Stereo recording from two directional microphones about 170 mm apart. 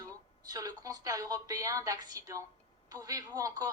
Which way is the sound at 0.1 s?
20° right (ahead or behind).